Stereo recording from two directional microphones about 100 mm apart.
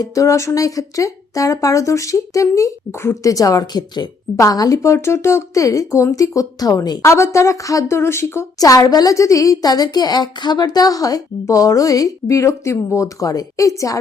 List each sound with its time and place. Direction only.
0.0 s a woman's voice: 35° left (ahead or behind)
4.4 s a woman's voice: 35° left (ahead or behind)
7.0 s a woman's voice: 30° left (ahead or behind)